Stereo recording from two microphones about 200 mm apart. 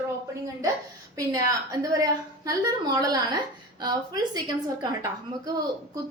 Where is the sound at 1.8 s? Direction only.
15° right (ahead or behind).